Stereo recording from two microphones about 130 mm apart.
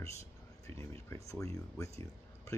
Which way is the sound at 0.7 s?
20° left (ahead or behind).